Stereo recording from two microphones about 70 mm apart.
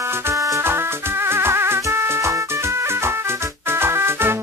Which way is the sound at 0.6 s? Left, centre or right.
Right.